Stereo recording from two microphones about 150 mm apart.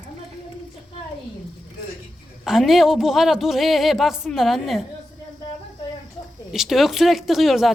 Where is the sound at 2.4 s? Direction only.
Centre (ahead or behind).